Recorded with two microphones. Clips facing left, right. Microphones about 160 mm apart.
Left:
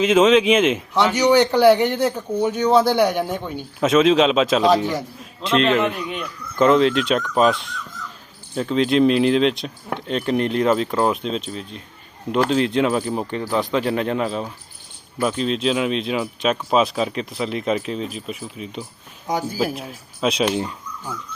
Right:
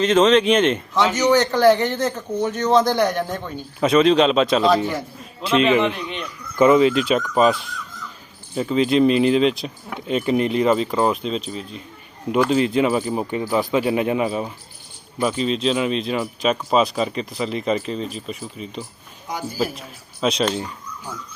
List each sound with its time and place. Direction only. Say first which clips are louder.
0.0 s a man's voice: left 1 dB; 10° left (ahead or behind)
3.8 s speech: even; centre (ahead or behind)
6.6 s speech: right 1 dB; 5° right (ahead or behind)